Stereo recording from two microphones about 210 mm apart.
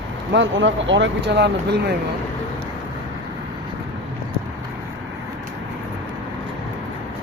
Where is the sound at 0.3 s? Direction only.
60° right (ahead or behind).